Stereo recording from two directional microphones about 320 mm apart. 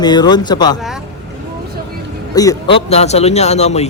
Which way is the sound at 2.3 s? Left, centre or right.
Centre.